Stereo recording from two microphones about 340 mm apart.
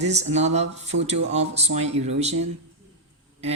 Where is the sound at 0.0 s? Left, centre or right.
Centre.